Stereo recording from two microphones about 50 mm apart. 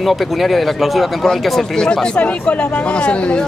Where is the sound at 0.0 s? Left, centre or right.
Centre.